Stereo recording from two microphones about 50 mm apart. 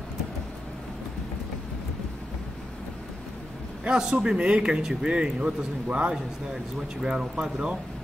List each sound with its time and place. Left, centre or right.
3.8 s a man's voice: centre